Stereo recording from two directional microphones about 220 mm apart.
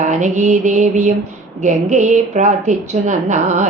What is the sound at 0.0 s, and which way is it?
A woman's voice, 35° right (ahead or behind).